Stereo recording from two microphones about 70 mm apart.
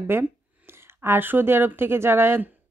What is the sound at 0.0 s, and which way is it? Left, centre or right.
A woman's voice, right.